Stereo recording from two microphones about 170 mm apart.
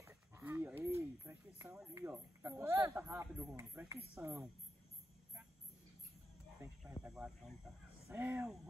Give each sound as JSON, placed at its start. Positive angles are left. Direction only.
{"t": 0.0, "sound": "a sound", "side_deg": -15}
{"t": 2.0, "sound": "speech", "side_deg": -15}
{"t": 6.8, "sound": "speech", "side_deg": -5}
{"t": 8.1, "sound": "speech", "side_deg": -15}